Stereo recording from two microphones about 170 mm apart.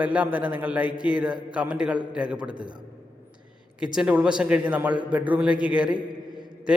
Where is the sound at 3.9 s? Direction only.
5° right (ahead or behind).